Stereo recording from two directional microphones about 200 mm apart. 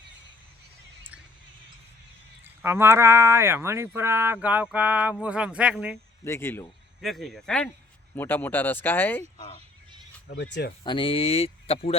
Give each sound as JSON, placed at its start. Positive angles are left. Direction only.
{"t": 2.4, "sound": "speech", "side_deg": -10}
{"t": 6.2, "sound": "speech", "side_deg": 10}
{"t": 7.0, "sound": "speech", "side_deg": 0}
{"t": 10.2, "sound": "speech", "side_deg": 60}
{"t": 10.8, "sound": "speech", "side_deg": 25}